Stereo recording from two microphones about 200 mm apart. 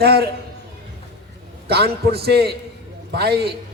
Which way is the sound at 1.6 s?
55° right (ahead or behind).